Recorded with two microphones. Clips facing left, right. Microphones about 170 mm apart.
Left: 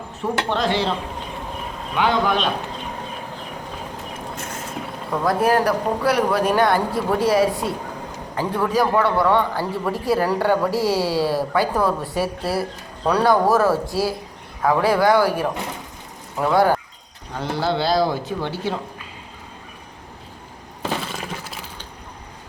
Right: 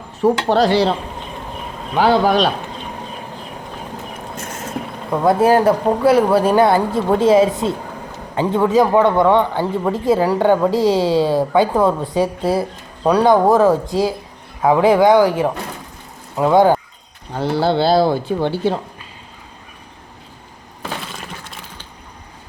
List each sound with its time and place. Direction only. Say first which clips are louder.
0.2 s speech: right 8 dB; 40° right (ahead or behind)
2.0 s speech: right 6 dB; 35° right (ahead or behind)
5.2 s a man's voice: right 6 dB; 25° right (ahead or behind)
17.3 s a man's voice: right 6 dB; 30° right (ahead or behind)
20.8 s a sound: left 2 dB; 5° left (ahead or behind)